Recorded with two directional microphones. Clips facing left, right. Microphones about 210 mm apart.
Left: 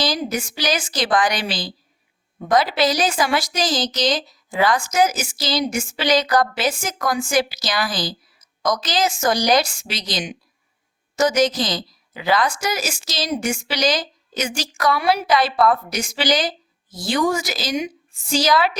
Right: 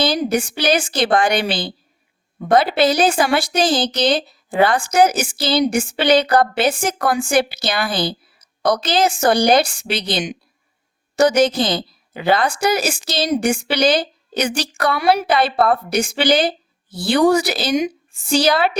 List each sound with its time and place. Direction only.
0.1 s speech: 60° right (ahead or behind)
14.8 s speech: 50° right (ahead or behind); by 18.4 s 70° right (ahead or behind)